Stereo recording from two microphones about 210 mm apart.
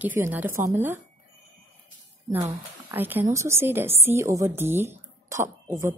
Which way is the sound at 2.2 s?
10° right (ahead or behind).